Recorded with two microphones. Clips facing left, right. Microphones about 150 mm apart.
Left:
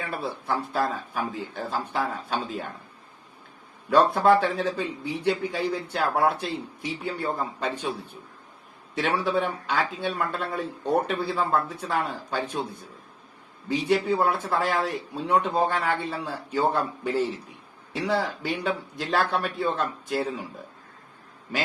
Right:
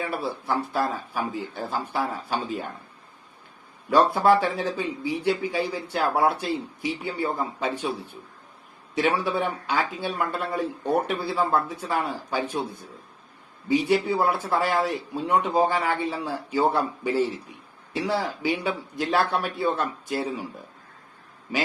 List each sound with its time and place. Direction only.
0.0 s a man's voice: 5° right (ahead or behind)
3.8 s a man's voice: 5° right (ahead or behind)
9.0 s a man's voice: centre (ahead or behind)
13.7 s a man's voice: centre (ahead or behind)